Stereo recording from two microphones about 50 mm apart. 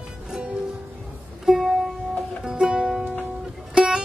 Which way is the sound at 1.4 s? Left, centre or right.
Centre.